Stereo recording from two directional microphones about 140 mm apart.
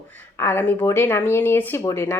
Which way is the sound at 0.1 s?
15° left (ahead or behind).